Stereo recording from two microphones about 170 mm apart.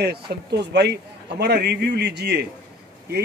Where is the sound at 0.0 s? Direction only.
70° right (ahead or behind).